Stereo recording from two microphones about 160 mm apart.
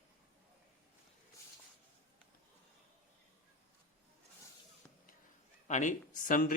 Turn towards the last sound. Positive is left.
turn(degrees=60)  # may be behind; listen again after turning